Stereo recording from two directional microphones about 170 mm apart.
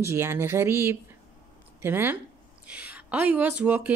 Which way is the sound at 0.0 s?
15° right (ahead or behind).